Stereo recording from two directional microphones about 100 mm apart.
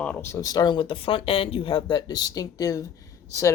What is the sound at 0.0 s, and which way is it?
Speech, 20° left (ahead or behind).